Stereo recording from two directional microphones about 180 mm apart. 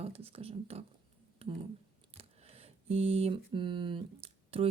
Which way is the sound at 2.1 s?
35° right (ahead or behind).